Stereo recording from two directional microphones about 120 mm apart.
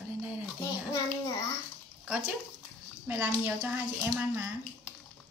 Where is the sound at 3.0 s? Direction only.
15° right (ahead or behind).